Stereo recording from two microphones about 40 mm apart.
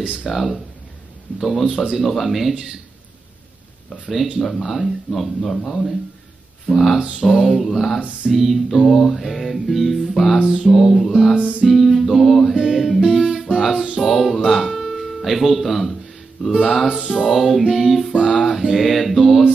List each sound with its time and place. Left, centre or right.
0.3 s music: centre
4.1 s music: centre
7.0 s a sound: centre
7.2 s music: centre
10.4 s a sound: centre
10.7 s music: centre
11.3 s music: right
11.6 s music: centre
13.0 s music: centre